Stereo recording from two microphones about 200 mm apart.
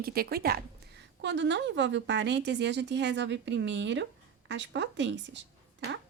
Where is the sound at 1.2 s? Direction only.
60° right (ahead or behind).